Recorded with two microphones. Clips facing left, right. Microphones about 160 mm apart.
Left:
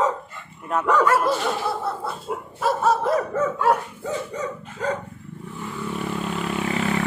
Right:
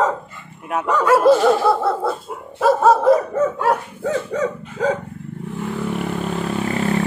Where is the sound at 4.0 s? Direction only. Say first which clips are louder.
Right 7 dB; 90° right.